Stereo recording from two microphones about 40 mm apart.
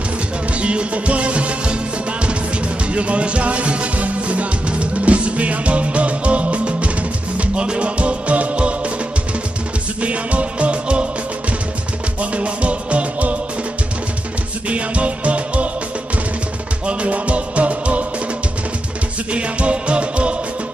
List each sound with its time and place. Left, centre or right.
0.6 s music: right
2.9 s music: right
10.0 s music: right
12.2 s music: right
14.7 s music: right
16.8 s music: right
19.3 s music: right